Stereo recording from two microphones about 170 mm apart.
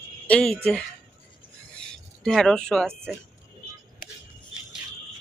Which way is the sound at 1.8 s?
5° left (ahead or behind).